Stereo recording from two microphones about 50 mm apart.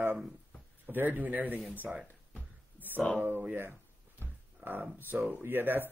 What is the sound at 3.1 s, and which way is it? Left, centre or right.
Speech, right.